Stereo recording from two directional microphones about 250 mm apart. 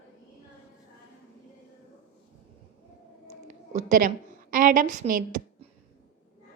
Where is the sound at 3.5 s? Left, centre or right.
Right.